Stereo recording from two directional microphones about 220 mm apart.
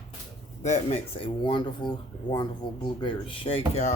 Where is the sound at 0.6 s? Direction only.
30° left (ahead or behind).